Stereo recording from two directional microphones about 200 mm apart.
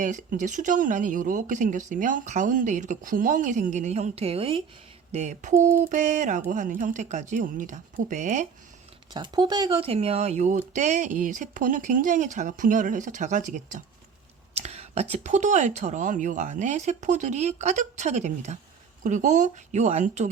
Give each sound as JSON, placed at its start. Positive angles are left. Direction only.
{"t": 0.0, "sound": "speech", "side_deg": -40}
{"t": 9.1, "sound": "speech", "side_deg": -20}